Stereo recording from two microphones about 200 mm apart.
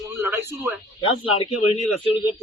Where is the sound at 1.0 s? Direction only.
25° left (ahead or behind).